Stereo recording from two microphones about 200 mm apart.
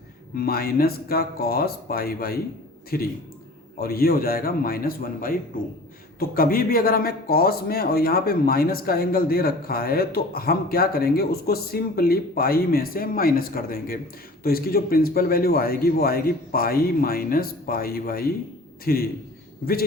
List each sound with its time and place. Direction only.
0.3 s speech: 50° left (ahead or behind)